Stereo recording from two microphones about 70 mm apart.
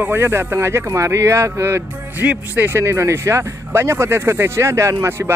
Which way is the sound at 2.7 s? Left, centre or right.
Right.